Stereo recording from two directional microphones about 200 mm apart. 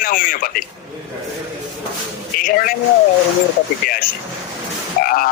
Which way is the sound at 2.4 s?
45° left (ahead or behind).